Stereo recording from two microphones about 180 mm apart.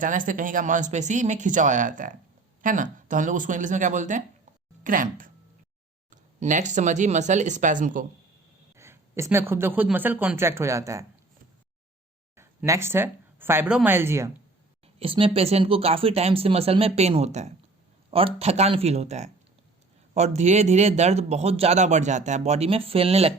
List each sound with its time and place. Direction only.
0.0 s speech: 45° right (ahead or behind)
8.7 s speech: 15° right (ahead or behind)
12.4 s speech: 15° right (ahead or behind)
14.9 s a man's voice: 30° right (ahead or behind)